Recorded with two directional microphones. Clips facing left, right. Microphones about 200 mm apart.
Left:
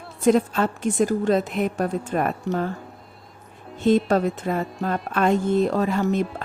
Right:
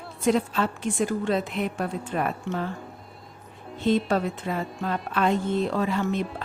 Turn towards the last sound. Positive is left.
turn(degrees=45)  # may be behind; listen again after turning